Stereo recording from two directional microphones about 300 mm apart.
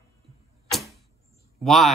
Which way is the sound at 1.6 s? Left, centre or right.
Centre.